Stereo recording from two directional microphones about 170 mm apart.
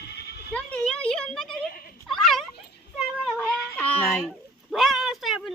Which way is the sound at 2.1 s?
Centre (ahead or behind).